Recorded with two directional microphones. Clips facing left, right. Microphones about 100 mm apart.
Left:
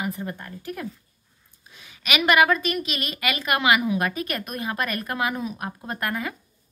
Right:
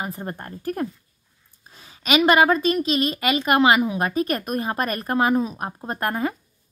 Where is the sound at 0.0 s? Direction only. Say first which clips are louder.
Even; 40° right (ahead or behind).